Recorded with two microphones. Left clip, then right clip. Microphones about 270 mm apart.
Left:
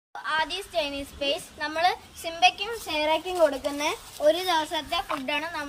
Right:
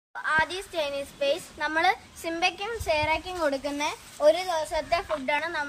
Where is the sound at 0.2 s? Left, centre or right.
Centre.